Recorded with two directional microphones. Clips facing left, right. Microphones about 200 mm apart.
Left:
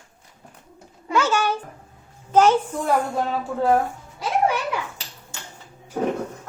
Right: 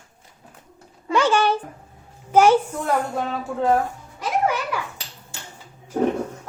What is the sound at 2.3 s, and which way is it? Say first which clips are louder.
Speech: right 1 dB; 10° right (ahead or behind).